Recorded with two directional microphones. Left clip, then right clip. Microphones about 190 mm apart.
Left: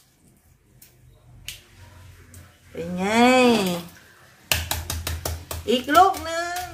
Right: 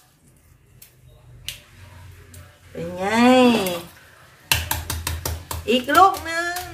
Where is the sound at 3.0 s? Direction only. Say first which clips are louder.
Right 1 dB; 25° left (ahead or behind).